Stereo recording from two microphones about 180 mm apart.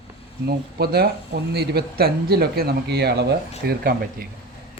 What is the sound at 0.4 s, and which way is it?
Speech, 60° right (ahead or behind).